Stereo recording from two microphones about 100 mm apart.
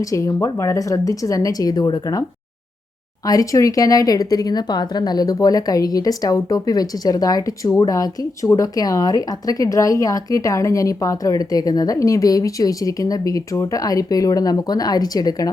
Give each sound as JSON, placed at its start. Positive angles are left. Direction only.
{"t": 0.0, "sound": "speech", "side_deg": 35}
{"t": 3.2, "sound": "speech", "side_deg": 35}